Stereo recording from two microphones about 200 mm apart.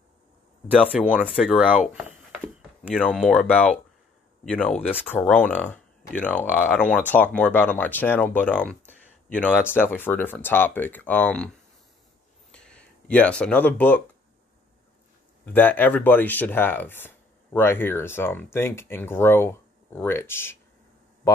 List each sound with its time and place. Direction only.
1.0 s speech: 5° left (ahead or behind)
3.1 s speech: centre (ahead or behind)
12.4 s a sound: 5° left (ahead or behind)
15.4 s speech: 10° left (ahead or behind)